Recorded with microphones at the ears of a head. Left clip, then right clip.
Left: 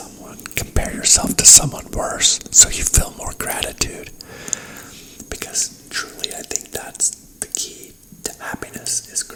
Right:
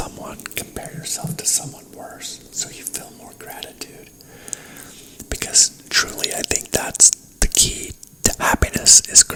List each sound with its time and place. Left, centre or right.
0.7 s speech: left
5.6 s speech: right